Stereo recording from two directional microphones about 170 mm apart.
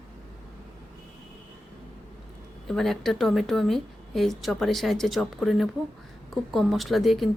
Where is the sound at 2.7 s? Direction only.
Centre (ahead or behind).